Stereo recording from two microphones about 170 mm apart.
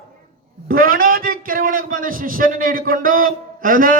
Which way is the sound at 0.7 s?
55° right (ahead or behind).